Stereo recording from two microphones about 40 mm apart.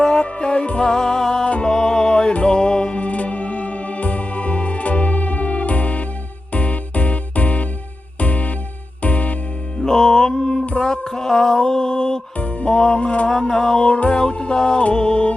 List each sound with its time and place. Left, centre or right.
0.0 s music: left
9.7 s music: centre
10.3 s music: centre
10.8 s a sound: centre
12.4 s music: left